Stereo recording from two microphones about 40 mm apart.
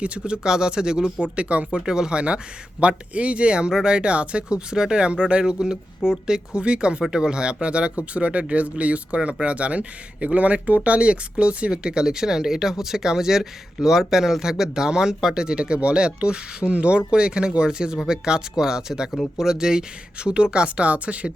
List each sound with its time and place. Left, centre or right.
0.0 s a man's voice: right
0.4 s a man's voice: centre
1.4 s speech: right
1.9 s a man's voice: centre
7.0 s a man's voice: centre